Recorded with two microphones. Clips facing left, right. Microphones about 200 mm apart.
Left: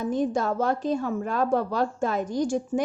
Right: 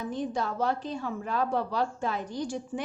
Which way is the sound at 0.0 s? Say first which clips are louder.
Left 6 dB; 45° left (ahead or behind).